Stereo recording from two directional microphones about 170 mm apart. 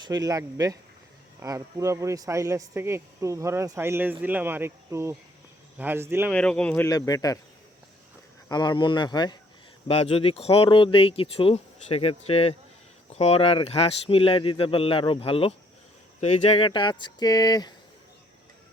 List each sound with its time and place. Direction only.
0.0 s a man's voice: 20° right (ahead or behind)
6.3 s speech: 5° left (ahead or behind)
6.8 s speech: 20° left (ahead or behind)
8.4 s speech: 25° left (ahead or behind)
9.8 s speech: 35° left (ahead or behind)